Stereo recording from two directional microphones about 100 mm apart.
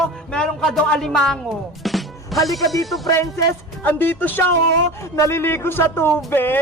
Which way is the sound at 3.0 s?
35° left (ahead or behind).